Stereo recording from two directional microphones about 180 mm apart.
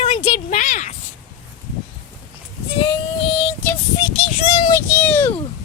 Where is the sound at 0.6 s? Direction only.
45° left (ahead or behind).